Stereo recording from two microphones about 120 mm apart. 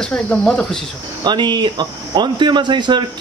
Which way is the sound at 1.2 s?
40° right (ahead or behind).